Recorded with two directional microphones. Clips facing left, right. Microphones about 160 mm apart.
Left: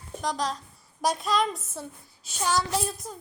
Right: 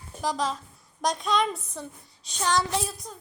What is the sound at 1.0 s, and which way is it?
A woman's voice, 5° left (ahead or behind).